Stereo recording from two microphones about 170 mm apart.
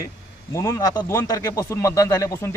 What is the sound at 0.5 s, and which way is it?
A man's voice, 15° left (ahead or behind).